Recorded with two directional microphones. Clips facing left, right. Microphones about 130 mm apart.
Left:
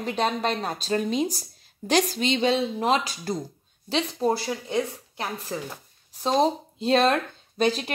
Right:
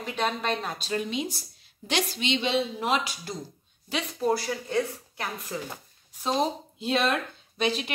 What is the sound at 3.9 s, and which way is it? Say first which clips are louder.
A woman's voice: left 2 dB; 25° left (ahead or behind).